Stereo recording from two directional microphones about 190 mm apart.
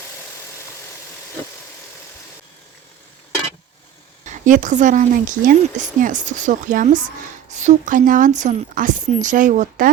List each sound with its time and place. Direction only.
4.3 s a woman's voice: 40° right (ahead or behind)